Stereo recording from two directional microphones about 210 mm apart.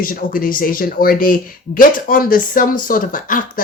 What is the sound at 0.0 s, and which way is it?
Speech, 40° left (ahead or behind).